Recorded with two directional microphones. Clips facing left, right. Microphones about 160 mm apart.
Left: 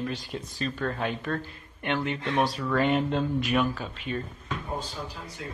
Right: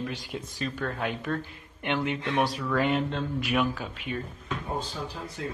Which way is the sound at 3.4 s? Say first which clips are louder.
Left 1 dB; 10° right (ahead or behind).